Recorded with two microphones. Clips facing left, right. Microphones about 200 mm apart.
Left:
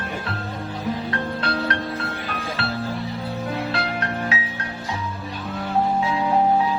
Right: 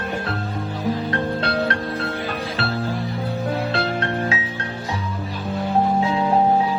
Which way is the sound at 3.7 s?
30° right (ahead or behind).